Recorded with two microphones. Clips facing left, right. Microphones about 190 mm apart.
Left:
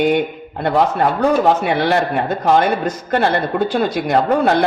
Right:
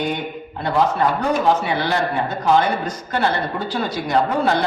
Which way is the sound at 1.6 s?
60° left (ahead or behind).